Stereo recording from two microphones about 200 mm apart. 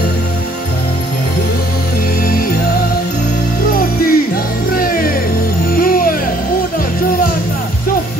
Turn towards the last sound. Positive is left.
turn(degrees=45)  # may be behind; listen again after turning